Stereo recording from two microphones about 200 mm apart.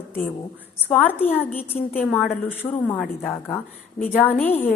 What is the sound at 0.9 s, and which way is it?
A woman's voice, 10° left (ahead or behind).